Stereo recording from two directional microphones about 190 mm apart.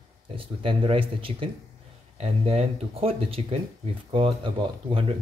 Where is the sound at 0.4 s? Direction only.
30° right (ahead or behind).